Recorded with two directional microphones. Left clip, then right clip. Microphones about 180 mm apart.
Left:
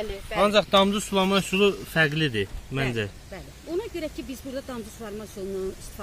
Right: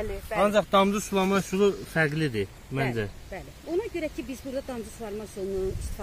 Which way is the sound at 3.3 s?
20° right (ahead or behind).